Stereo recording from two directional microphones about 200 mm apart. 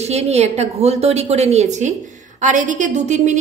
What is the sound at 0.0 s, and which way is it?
A woman's voice, 35° right (ahead or behind).